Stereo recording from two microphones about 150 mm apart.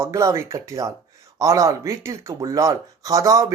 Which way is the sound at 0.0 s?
20° right (ahead or behind).